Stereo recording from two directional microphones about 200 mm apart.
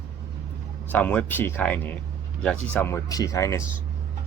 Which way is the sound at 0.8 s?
10° left (ahead or behind).